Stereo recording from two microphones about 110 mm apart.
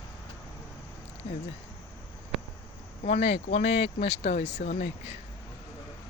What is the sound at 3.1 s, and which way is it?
Speech, 70° left (ahead or behind).